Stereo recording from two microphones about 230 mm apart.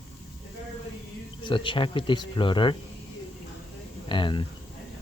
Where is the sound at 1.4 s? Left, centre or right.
Left.